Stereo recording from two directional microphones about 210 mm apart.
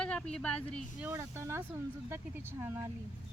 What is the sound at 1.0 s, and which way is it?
Speech, 10° right (ahead or behind).